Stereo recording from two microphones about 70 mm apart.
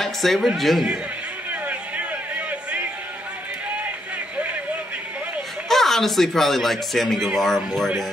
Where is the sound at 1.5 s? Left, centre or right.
Right.